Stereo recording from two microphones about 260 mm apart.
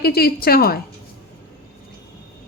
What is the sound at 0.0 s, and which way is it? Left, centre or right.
Speech, left.